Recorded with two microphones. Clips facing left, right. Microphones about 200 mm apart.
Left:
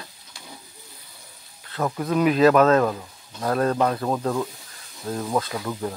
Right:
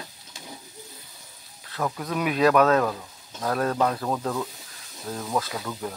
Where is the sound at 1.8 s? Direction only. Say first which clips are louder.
Left 4 dB; 15° left (ahead or behind).